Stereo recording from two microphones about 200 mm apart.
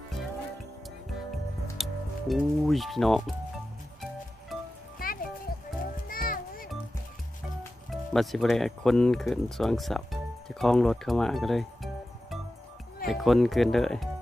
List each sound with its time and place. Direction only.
1.8 s speech: centre (ahead or behind)
4.9 s music: 45° left (ahead or behind)
7.9 s speech: centre (ahead or behind)